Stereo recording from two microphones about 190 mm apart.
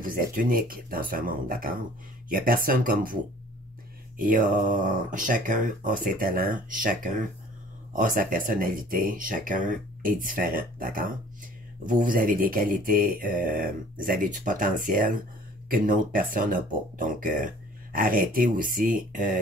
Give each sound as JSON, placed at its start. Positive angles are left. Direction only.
{"t": 0.0, "sound": "speech", "side_deg": -45}
{"t": 4.3, "sound": "speech", "side_deg": -45}